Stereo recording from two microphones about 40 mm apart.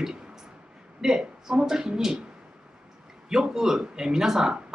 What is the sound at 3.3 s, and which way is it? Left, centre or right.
Speech, centre.